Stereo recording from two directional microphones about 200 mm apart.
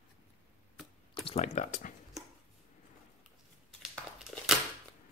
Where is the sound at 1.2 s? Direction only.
30° left (ahead or behind).